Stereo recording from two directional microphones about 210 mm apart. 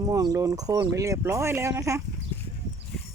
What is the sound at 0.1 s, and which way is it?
Speech, 15° right (ahead or behind).